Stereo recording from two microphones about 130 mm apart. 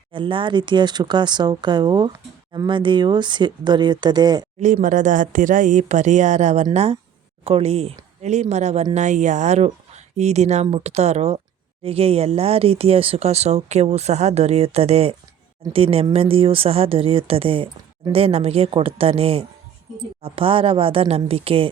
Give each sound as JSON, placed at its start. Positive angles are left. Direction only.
{"t": 0.1, "sound": "speech", "side_deg": -40}
{"t": 4.6, "sound": "speech", "side_deg": -80}